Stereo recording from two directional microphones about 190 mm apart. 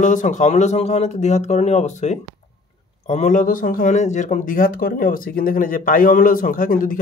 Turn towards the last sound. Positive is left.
turn(degrees=45)  # may be behind; listen again after turning